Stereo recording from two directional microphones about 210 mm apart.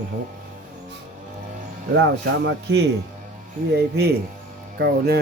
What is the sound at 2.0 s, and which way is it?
Speech, 55° right (ahead or behind).